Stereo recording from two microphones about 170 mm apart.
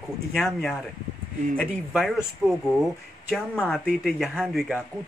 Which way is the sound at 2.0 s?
Centre (ahead or behind).